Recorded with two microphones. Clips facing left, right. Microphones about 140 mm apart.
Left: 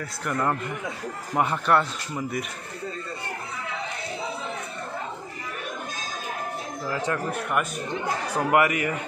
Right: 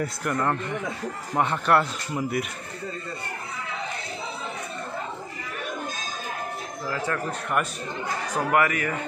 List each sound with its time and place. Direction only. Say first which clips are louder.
0.2 s speech: left 2 dB; centre (ahead or behind)
6.9 s a man's voice: left 1 dB; 15° left (ahead or behind)